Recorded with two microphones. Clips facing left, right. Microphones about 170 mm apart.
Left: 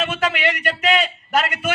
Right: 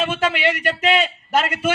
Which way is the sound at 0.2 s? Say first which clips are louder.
Right 1 dB; 30° right (ahead or behind).